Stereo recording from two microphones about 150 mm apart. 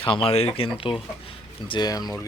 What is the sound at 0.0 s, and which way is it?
Speech, 35° left (ahead or behind).